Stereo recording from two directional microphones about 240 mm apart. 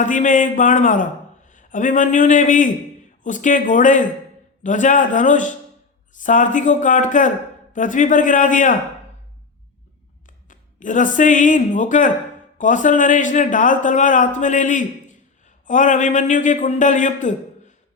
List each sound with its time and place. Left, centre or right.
0.0 s a man's voice: left
10.2 s speech: left